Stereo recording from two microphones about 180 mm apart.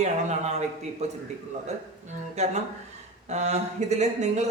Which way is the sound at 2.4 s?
40° right (ahead or behind).